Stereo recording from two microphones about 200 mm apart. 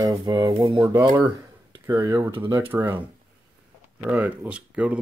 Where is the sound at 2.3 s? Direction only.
25° right (ahead or behind).